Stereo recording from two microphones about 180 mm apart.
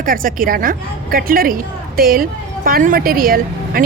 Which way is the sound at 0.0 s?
50° right (ahead or behind).